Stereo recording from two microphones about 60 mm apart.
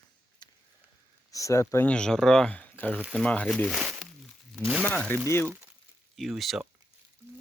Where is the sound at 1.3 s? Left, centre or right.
Left.